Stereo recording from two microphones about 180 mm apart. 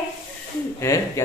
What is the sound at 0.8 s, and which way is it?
Speech, 15° left (ahead or behind).